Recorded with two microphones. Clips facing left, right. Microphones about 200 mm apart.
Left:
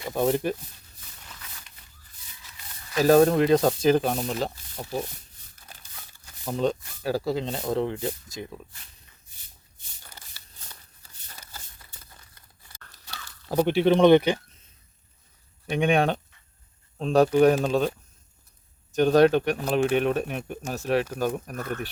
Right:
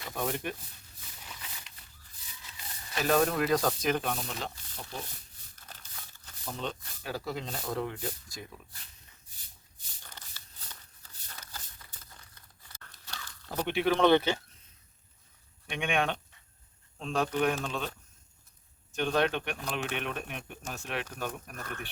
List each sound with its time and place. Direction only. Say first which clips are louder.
0.1 s speech: left 10 dB; 30° left (ahead or behind)
3.0 s speech: left 9 dB; 35° left (ahead or behind)
5.6 s crumpling: left 1 dB; 10° left (ahead or behind)
6.4 s speech: left 11 dB; 45° left (ahead or behind); by 8.6 s 30° left (ahead or behind)
10.0 s a sound: left 1 dB; 10° left (ahead or behind)
12.3 s tearing: left 1 dB; 10° left (ahead or behind)
13.7 s speech: left 7 dB; 30° left (ahead or behind)
15.7 s speech: left 8 dB; 35° left (ahead or behind)